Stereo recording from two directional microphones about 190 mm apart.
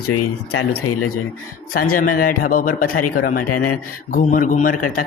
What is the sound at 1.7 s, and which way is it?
Speech, 50° left (ahead or behind).